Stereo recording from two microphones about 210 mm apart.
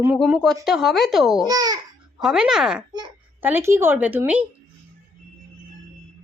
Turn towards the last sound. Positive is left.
turn(degrees=-10)  # may be behind; listen again after turning